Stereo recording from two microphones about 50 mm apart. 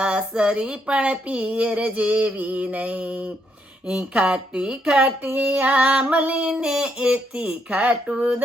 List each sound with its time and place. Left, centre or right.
0.0 s speech: centre
2.3 s female singing: right
2.6 s speech: right
5.0 s female singing: right
6.3 s speech: right